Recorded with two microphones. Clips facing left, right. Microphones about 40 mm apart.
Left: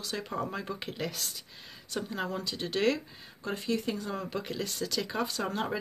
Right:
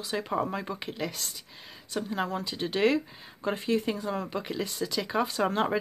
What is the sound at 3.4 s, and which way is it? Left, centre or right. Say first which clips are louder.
Speech: right 4 dB; right.